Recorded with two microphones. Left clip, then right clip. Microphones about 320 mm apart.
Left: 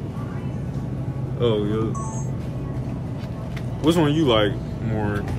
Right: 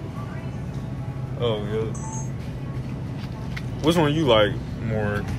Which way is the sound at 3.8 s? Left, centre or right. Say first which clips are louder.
Even; centre.